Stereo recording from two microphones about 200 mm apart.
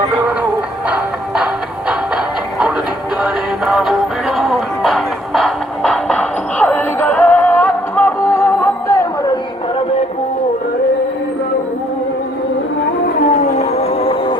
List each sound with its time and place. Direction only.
3.2 s synthetic singing: 5° right (ahead or behind); by 9.4 s 15° left (ahead or behind)
13.1 s whale vocalization: 40° left (ahead or behind)